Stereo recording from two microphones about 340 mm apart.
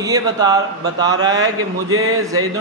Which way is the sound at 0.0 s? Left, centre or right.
Centre.